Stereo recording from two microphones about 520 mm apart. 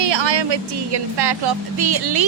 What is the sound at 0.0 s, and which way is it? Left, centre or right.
Speech, right.